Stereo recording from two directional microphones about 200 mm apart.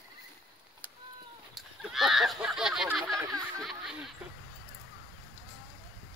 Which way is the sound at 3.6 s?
Centre (ahead or behind).